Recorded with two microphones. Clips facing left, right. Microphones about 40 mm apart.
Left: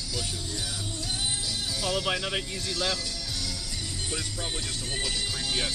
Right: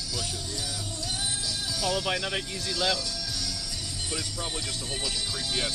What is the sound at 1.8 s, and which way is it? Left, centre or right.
Speech, left.